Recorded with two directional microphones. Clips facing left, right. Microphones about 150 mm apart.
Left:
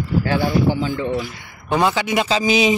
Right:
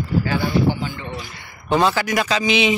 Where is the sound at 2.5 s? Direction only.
40° left (ahead or behind).